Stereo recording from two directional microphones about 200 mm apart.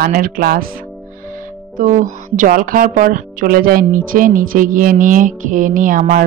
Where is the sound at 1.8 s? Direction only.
40° right (ahead or behind).